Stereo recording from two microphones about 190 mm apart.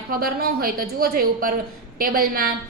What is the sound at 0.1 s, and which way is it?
A woman's voice, 50° right (ahead or behind).